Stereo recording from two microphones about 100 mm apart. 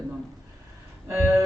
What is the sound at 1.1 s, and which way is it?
Speech, 30° right (ahead or behind).